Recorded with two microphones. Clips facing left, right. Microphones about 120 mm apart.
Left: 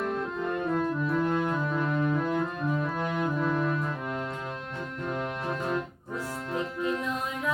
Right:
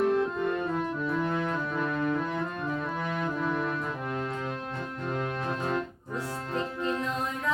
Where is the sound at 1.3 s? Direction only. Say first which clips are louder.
Left 2 dB; 20° left (ahead or behind).